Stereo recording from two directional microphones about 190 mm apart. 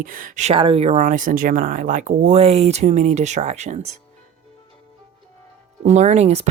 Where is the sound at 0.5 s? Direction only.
30° right (ahead or behind).